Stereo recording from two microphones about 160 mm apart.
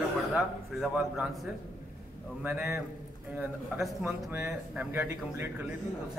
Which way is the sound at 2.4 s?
10° right (ahead or behind).